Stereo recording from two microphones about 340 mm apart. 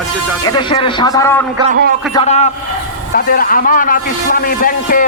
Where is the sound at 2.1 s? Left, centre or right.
Centre.